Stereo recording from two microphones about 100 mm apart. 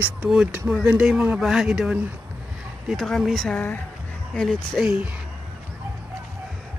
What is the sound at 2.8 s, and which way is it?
Speech, centre (ahead or behind).